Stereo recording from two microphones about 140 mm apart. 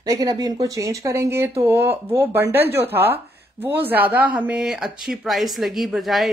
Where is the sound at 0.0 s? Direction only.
25° right (ahead or behind).